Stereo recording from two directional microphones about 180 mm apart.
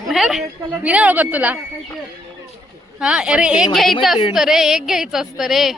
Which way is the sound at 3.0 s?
5° right (ahead or behind).